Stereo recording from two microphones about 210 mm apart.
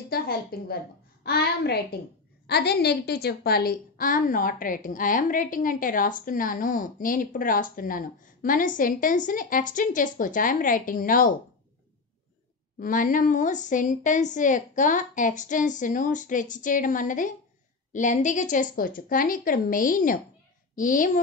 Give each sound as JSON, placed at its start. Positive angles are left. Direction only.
{"t": 0.1, "sound": "a woman's voice", "side_deg": 45}
{"t": 12.7, "sound": "a woman's voice", "side_deg": 40}